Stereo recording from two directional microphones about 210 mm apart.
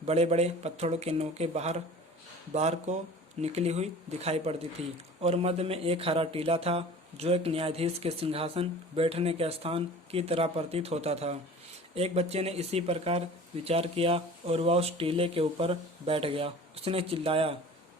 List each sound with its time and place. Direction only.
0.0 s speech: 30° right (ahead or behind)